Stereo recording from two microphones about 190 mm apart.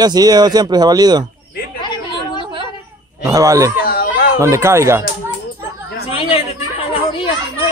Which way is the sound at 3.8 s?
50° left (ahead or behind).